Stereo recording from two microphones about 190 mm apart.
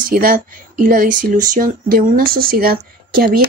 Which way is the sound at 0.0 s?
50° right (ahead or behind).